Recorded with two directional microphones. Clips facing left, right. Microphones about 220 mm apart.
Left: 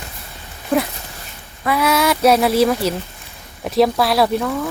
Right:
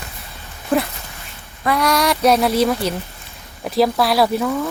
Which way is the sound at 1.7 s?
5° left (ahead or behind).